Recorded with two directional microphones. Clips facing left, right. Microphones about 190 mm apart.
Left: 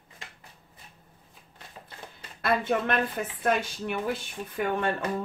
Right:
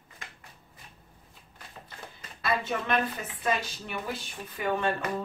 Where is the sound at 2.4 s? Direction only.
55° left (ahead or behind).